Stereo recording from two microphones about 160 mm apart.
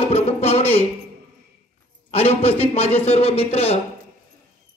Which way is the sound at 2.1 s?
40° left (ahead or behind).